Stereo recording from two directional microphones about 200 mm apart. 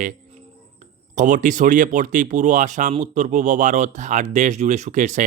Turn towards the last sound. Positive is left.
turn(degrees=-35)  # may be behind; listen again after turning